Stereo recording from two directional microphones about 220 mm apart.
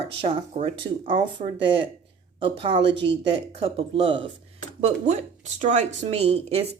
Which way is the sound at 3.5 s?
25° right (ahead or behind).